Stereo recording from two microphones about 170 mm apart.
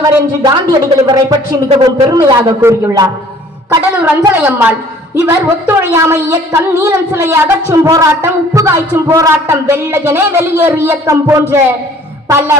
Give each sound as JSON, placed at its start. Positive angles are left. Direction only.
{"t": 0.4, "sound": "speech", "side_deg": -25}
{"t": 3.9, "sound": "music", "side_deg": -5}